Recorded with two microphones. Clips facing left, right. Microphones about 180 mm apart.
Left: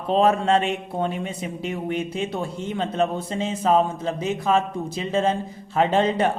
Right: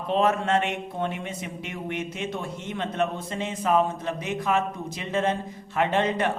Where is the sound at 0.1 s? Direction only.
30° left (ahead or behind).